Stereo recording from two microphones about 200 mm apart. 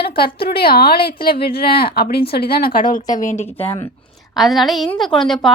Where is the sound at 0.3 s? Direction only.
50° left (ahead or behind).